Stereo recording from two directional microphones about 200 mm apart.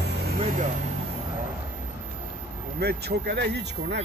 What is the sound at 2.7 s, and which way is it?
Speech, 55° right (ahead or behind).